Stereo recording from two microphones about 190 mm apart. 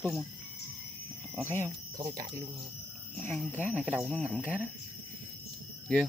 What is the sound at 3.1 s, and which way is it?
Speech, 10° left (ahead or behind).